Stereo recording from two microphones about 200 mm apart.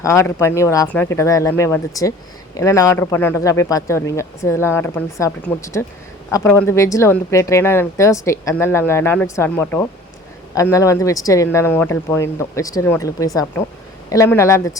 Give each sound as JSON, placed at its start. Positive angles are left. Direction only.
{"t": 0.0, "sound": "speech", "side_deg": 15}